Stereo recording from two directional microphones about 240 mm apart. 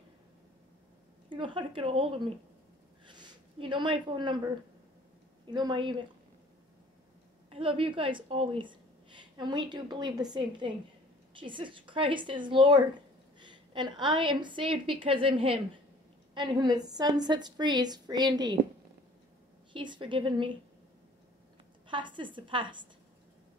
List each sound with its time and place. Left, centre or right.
1.3 s a woman's voice: right
3.1 s a sound: centre
5.5 s a woman's voice: centre
7.4 s a woman's voice: right
19.7 s a woman's voice: centre
21.8 s a woman's voice: centre